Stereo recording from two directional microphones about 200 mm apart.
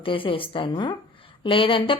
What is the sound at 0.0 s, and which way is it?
A woman's voice, 25° left (ahead or behind).